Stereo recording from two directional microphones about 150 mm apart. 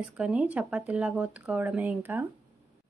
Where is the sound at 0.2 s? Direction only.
10° right (ahead or behind).